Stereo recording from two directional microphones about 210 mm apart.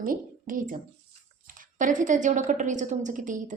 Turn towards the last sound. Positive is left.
turn(degrees=-40)  # may be behind; listen again after turning